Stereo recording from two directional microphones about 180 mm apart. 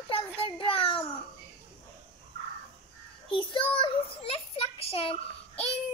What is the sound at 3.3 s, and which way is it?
Child singing, 25° left (ahead or behind).